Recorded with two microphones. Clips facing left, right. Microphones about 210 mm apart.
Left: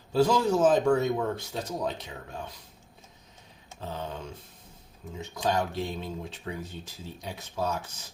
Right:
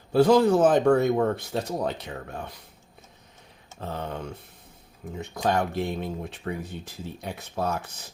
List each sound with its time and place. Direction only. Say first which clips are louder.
0.1 s speech: right 5 dB; 60° right (ahead or behind)
3.8 s speech: right 3 dB; 60° right (ahead or behind)